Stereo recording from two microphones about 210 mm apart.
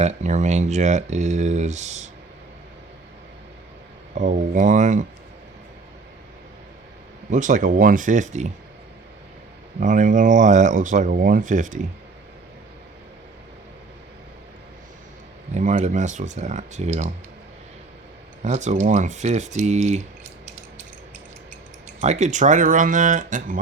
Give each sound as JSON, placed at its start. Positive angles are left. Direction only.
{"t": 0.0, "sound": "speech", "side_deg": -35}
{"t": 4.1, "sound": "speech", "side_deg": -35}
{"t": 7.3, "sound": "speech", "side_deg": -35}
{"t": 9.8, "sound": "speech", "side_deg": -35}
{"t": 15.5, "sound": "speech", "side_deg": -35}
{"t": 18.4, "sound": "speech", "side_deg": -35}
{"t": 22.0, "sound": "speech", "side_deg": -35}